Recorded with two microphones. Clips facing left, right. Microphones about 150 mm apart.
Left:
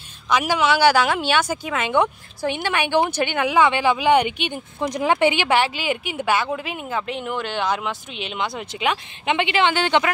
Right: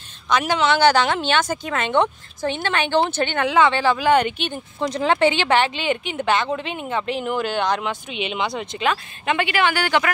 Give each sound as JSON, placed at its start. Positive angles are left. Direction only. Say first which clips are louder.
{"t": 0.3, "sound": "a woman's voice", "louder": "even", "side_deg": 10}
{"t": 8.8, "sound": "a woman's voice", "louder": "even", "side_deg": 20}